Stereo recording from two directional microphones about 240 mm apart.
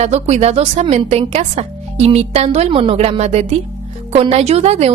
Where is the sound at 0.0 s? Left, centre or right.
Right.